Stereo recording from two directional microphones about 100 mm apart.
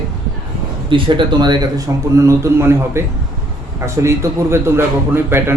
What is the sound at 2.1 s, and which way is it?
A man's voice, 30° right (ahead or behind).